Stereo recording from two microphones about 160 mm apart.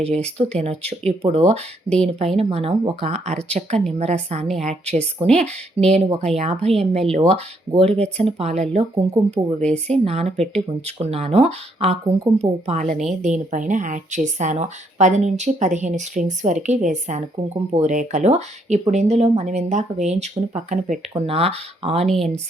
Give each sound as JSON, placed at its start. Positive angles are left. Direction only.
{"t": 0.0, "sound": "speech", "side_deg": -40}
{"t": 9.6, "sound": "speech", "side_deg": 5}
{"t": 10.0, "sound": "speech", "side_deg": -40}
{"t": 21.2, "sound": "speech", "side_deg": -40}
{"t": 22.0, "sound": "speech", "side_deg": 0}